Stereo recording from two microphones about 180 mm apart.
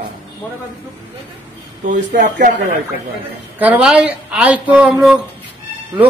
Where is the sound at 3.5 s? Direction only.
10° right (ahead or behind).